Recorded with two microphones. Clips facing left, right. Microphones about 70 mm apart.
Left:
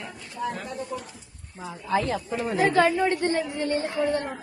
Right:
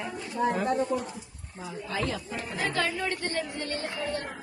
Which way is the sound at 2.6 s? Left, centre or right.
Left.